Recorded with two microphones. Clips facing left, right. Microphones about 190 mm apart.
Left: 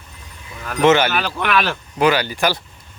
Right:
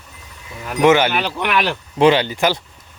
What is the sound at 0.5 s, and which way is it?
Speech, 15° right (ahead or behind).